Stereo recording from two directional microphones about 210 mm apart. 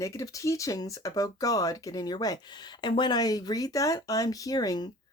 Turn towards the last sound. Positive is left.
turn(degrees=20)  # may be behind; listen again after turning